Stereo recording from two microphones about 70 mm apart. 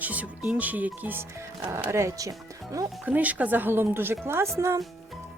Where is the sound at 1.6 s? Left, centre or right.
Right.